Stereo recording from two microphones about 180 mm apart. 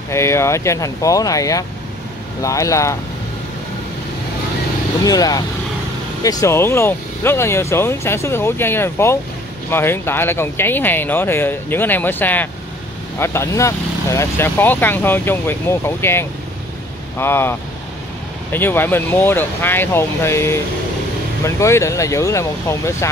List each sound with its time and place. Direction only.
0.1 s speech: 15° left (ahead or behind)
5.0 s speech: 20° left (ahead or behind)